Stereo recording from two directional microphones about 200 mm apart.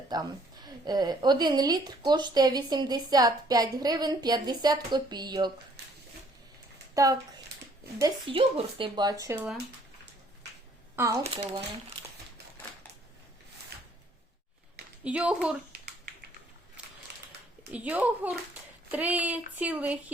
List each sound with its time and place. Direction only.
0.1 s a woman's voice: 20° right (ahead or behind)
6.9 s a woman's voice: 15° right (ahead or behind)
10.9 s speech: 15° right (ahead or behind)
15.0 s speech: 5° right (ahead or behind)
16.8 s a sound: 5° right (ahead or behind)
17.7 s a child's voice: 10° right (ahead or behind)